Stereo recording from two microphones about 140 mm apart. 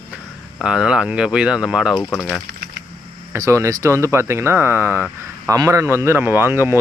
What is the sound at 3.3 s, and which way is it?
Speech, 20° right (ahead or behind).